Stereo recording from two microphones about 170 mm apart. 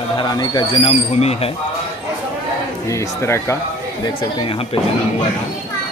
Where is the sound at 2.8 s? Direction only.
20° left (ahead or behind).